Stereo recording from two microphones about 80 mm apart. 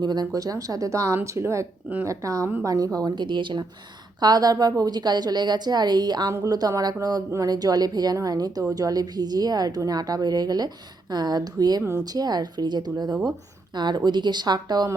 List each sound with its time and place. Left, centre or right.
0.0 s a woman's voice: right
0.3 s speech: right
3.2 s speech: right
4.2 s a woman's voice: right